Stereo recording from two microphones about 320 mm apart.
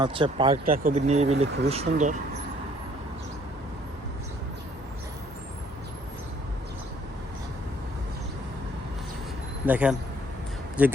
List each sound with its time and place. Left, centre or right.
0.0 s speech: centre
0.6 s speech: right
9.6 s speech: centre